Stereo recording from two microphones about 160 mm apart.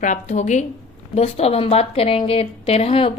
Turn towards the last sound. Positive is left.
turn(degrees=35)  # may be behind; listen again after turning